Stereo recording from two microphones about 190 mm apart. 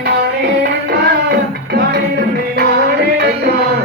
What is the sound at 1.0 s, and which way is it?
Music, 55° right (ahead or behind).